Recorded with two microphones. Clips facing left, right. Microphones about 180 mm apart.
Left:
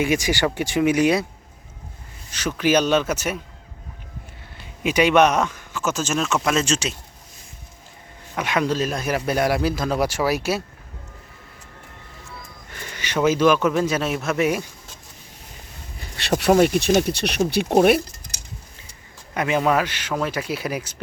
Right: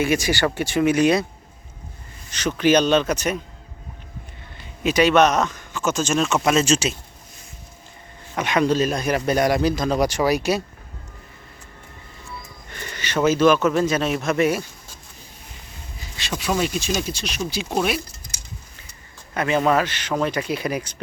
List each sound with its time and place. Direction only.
0.0 s speech: 15° left (ahead or behind)
2.3 s speech: 5° left (ahead or behind)
4.8 s a man's voice: 10° left (ahead or behind); by 6.9 s 5° right (ahead or behind)
8.4 s a man's voice: 5° left (ahead or behind)
12.7 s speech: 5° left (ahead or behind)
16.0 s speech: 60° left (ahead or behind)
19.3 s speech: 10° left (ahead or behind)